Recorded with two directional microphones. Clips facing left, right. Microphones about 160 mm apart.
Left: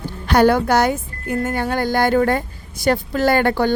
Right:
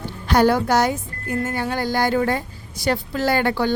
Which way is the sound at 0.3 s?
60° left (ahead or behind).